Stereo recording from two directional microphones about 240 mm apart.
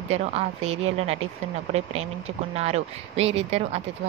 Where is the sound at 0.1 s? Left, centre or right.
Right.